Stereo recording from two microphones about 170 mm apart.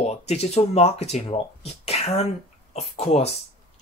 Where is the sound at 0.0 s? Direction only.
40° left (ahead or behind).